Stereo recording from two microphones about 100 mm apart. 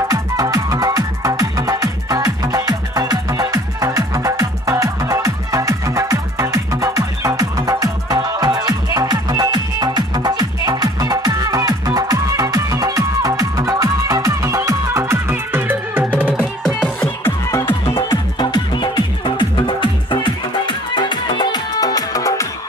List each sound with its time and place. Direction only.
0.1 s music: 35° right (ahead or behind); by 16.3 s 15° right (ahead or behind)
17.0 s music: 25° left (ahead or behind)
18.4 s music: 50° left (ahead or behind)